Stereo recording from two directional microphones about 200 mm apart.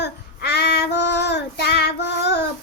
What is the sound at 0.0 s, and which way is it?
Child singing, 55° left (ahead or behind).